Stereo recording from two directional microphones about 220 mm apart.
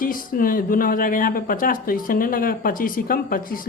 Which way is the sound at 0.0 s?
40° left (ahead or behind).